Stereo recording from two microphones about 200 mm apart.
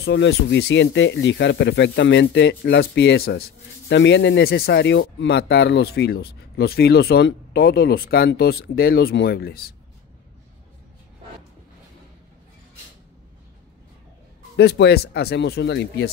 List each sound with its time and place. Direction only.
0.0 s speech: 60° left (ahead or behind)
14.6 s speech: 60° left (ahead or behind)